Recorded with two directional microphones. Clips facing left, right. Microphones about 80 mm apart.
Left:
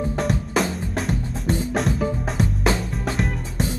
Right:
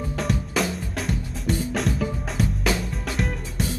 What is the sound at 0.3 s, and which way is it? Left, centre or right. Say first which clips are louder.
Drum: left 2 dB; left.